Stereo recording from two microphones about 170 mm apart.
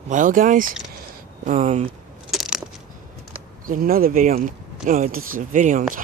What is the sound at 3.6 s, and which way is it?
Speech, 55° right (ahead or behind).